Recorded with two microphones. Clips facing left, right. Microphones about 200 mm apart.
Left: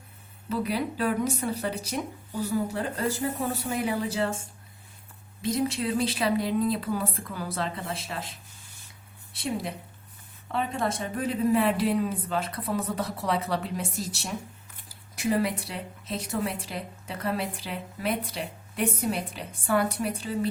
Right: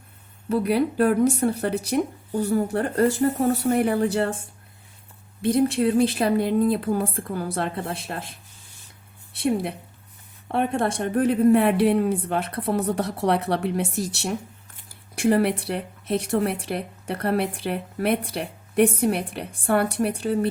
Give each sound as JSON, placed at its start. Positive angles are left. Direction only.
{"t": 0.4, "sound": "speech", "side_deg": -60}
{"t": 5.4, "sound": "a woman's voice", "side_deg": -60}